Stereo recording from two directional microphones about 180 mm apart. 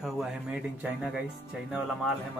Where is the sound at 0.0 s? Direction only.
5° right (ahead or behind).